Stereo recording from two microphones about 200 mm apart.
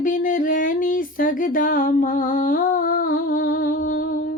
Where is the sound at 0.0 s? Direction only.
40° left (ahead or behind).